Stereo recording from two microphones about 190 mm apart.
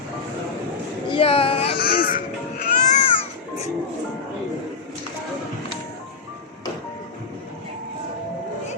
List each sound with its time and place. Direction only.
1.1 s child singing: 30° left (ahead or behind)
1.8 s music: 50° left (ahead or behind)
2.8 s baby cry: 40° left (ahead or behind)